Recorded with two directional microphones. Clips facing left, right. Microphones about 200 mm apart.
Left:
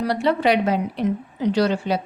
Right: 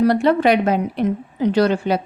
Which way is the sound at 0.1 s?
50° right (ahead or behind).